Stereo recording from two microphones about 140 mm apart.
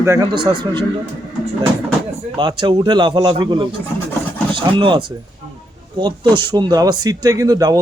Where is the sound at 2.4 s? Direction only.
35° right (ahead or behind).